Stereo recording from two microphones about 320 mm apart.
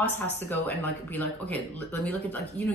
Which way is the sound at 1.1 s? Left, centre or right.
Centre.